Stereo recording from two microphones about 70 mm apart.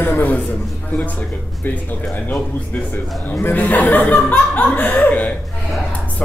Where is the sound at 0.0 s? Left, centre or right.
Left.